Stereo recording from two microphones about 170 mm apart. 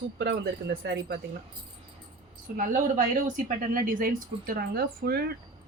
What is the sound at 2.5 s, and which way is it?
A woman's voice, 55° right (ahead or behind).